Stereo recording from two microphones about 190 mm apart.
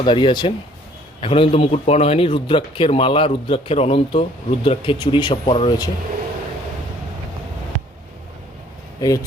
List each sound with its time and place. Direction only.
0.0 s a man's voice: 25° left (ahead or behind)
9.0 s speech: 20° left (ahead or behind)